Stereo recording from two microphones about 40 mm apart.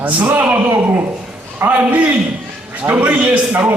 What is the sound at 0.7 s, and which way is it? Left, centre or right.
Speech, right.